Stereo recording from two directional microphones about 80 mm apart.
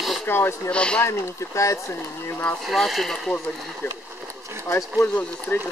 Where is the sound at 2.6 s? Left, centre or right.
Centre.